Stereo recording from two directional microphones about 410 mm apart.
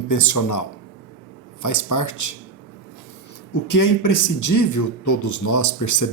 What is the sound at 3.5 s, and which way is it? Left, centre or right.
A man's voice, left.